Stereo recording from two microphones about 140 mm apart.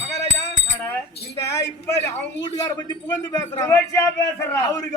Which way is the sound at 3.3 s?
20° left (ahead or behind).